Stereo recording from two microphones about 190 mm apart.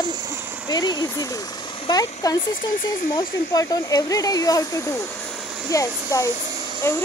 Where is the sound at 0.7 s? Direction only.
20° left (ahead or behind).